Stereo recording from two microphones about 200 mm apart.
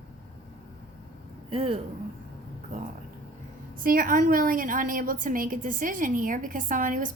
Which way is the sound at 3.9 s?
45° right (ahead or behind).